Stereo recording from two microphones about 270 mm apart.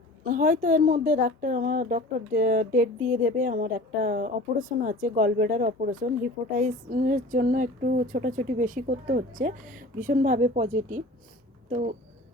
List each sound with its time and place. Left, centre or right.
0.3 s speech: right